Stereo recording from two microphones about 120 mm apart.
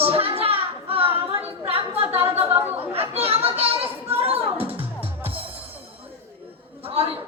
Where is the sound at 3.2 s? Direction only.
55° right (ahead or behind).